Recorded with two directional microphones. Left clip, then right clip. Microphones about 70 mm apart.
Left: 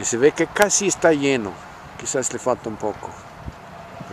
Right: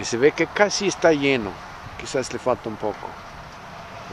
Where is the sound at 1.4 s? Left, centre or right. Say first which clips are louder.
Even; right.